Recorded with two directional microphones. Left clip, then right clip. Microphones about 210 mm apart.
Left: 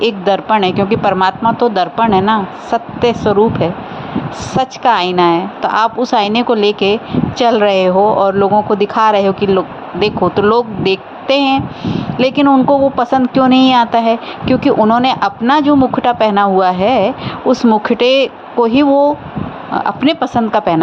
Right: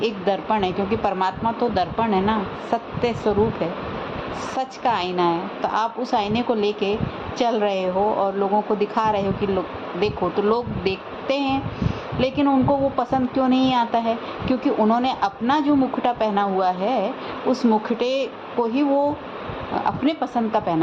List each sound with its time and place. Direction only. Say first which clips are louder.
0.0 s a woman's voice: left 9 dB; 25° left (ahead or behind)